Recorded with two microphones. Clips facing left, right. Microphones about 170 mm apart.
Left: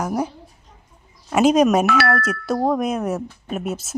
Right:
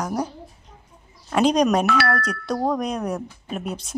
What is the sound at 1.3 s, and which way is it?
Speech, 5° left (ahead or behind).